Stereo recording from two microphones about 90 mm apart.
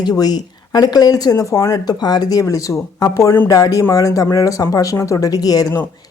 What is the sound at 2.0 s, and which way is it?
Speech, 50° left (ahead or behind).